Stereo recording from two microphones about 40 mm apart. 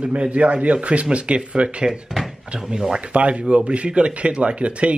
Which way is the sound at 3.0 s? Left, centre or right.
Right.